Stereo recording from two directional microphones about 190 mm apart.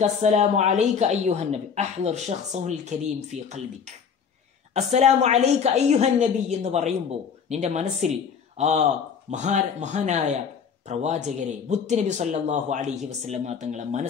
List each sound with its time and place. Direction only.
0.0 s a woman's voice: 35° right (ahead or behind)